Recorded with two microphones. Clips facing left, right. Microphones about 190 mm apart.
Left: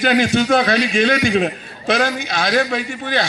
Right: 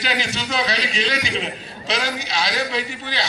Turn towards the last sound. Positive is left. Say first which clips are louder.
# left 6 dB
turn(degrees=50)  # may be behind; listen again after turning